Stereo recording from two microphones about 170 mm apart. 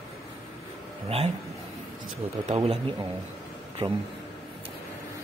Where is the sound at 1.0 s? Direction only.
35° right (ahead or behind).